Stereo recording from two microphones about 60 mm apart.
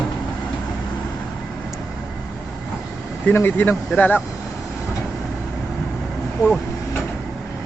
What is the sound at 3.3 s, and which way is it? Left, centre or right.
Speech, left.